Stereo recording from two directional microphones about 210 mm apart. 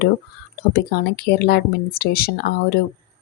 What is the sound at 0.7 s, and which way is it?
Speech, 50° left (ahead or behind).